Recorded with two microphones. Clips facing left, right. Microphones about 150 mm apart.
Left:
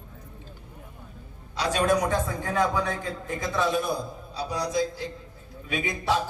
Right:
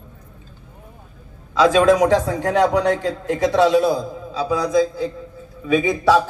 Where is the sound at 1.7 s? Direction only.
90° right.